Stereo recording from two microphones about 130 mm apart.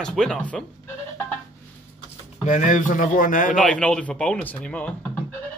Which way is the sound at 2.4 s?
80° left.